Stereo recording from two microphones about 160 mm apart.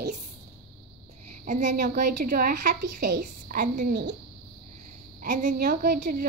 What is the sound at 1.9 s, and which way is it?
A woman's voice, 60° right (ahead or behind).